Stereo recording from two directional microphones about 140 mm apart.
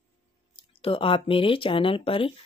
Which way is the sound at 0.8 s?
40° left (ahead or behind).